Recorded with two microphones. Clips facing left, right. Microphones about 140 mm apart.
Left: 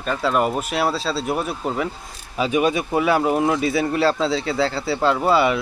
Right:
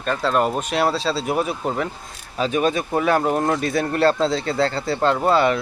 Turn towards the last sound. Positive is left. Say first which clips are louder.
# even
turn(degrees=5)  # may be behind; listen again after turning